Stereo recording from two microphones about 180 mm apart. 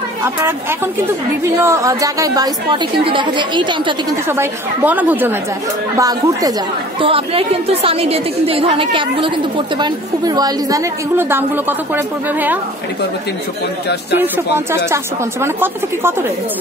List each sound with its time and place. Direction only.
0.2 s a woman's voice: 15° right (ahead or behind)
4.3 s a woman's voice: 10° right (ahead or behind)
7.0 s a woman's voice: 30° right (ahead or behind); by 12.5 s 10° right (ahead or behind)
14.1 s a woman's voice: 10° right (ahead or behind)